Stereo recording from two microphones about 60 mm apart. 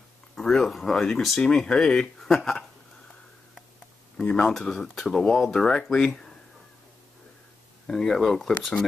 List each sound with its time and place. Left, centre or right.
0.4 s speech: centre
4.2 s speech: centre
7.8 s speech: centre